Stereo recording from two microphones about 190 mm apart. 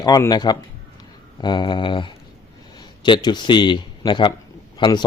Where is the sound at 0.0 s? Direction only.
20° left (ahead or behind).